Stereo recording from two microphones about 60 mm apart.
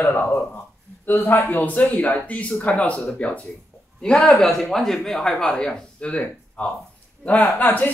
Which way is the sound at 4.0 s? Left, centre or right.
Centre.